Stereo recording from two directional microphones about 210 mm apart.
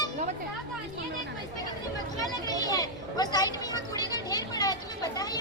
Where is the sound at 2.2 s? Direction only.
20° left (ahead or behind).